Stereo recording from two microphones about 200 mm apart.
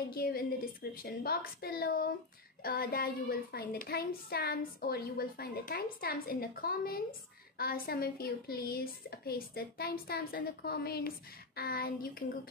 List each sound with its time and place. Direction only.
0.1 s a woman's voice: 50° left (ahead or behind)